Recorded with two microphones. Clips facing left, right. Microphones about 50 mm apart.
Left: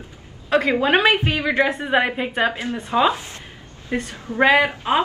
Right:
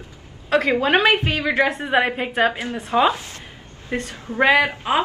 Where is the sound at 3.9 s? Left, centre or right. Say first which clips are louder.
Left 1 dB; centre.